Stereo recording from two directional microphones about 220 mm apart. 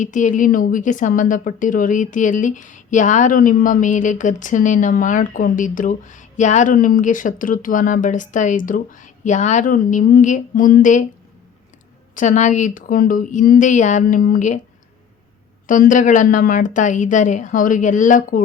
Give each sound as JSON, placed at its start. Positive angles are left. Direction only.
{"t": 0.0, "sound": "speech", "side_deg": 35}
{"t": 12.1, "sound": "speech", "side_deg": 35}
{"t": 15.6, "sound": "speech", "side_deg": 35}